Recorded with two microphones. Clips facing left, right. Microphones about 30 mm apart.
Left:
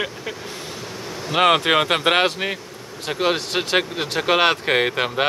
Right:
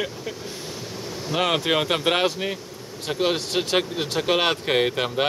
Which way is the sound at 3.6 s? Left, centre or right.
Left.